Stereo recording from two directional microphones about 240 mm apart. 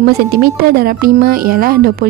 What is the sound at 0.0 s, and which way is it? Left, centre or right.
Speech, right.